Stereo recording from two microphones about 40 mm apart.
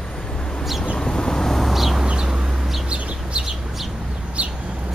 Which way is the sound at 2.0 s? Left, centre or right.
Centre.